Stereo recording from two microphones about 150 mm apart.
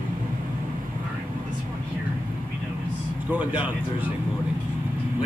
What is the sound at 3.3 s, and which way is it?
Speech, 10° right (ahead or behind).